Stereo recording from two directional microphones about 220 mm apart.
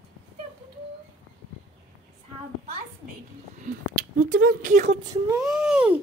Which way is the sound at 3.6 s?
40° right (ahead or behind).